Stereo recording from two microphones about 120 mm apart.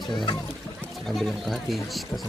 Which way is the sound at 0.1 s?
40° left (ahead or behind).